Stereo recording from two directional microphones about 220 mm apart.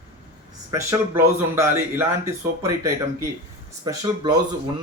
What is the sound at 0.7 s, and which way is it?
Speech, 15° right (ahead or behind).